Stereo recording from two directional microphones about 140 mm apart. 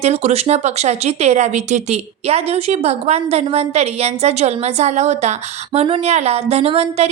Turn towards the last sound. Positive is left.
turn(degrees=-45)  # may be behind; listen again after turning